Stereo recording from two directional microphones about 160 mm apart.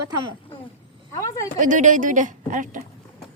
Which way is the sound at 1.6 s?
55° right (ahead or behind).